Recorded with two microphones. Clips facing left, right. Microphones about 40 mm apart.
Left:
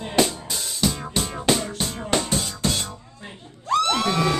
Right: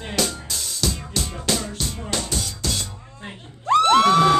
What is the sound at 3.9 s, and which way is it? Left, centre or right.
Crowd, right.